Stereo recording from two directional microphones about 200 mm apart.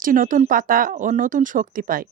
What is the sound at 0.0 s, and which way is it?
Speech, 40° right (ahead or behind).